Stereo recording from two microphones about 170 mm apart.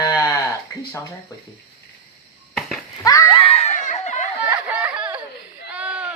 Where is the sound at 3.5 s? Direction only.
45° left (ahead or behind).